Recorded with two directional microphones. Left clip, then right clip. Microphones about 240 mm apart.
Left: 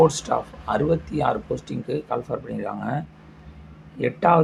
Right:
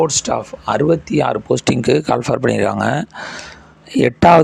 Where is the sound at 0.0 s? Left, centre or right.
Right.